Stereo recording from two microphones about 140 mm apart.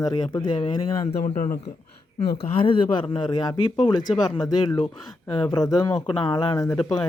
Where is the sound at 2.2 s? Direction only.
40° left (ahead or behind).